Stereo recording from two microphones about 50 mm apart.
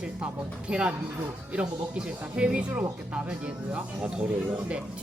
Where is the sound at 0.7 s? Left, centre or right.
Right.